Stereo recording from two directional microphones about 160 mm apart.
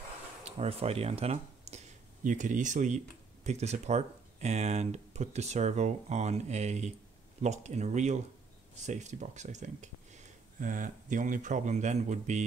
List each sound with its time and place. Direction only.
0.4 s speech: 40° right (ahead or behind)
2.2 s speech: 50° right (ahead or behind)